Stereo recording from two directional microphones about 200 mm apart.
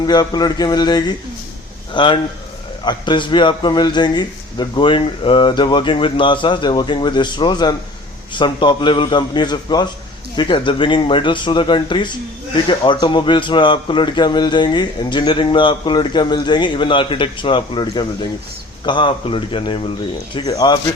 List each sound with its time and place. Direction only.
0.0 s a man's voice: 20° left (ahead or behind)